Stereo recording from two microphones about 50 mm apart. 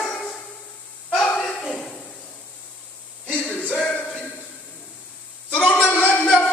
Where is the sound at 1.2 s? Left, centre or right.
Centre.